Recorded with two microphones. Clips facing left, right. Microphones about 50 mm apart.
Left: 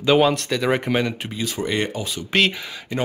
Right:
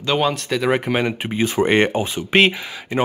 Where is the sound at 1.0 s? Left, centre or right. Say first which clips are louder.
Right 6 dB; right.